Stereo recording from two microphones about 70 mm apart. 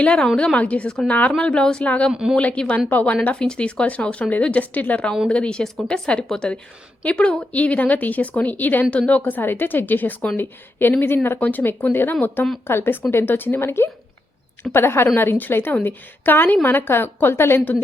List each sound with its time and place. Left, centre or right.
0.0 s a woman's voice: centre; by 17.8 s left